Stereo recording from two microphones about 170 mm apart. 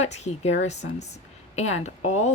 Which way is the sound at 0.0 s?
40° left (ahead or behind).